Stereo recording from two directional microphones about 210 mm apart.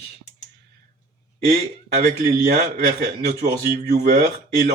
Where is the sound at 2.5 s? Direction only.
40° right (ahead or behind).